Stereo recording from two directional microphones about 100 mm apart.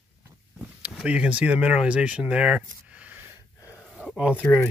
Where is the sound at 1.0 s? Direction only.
10° right (ahead or behind).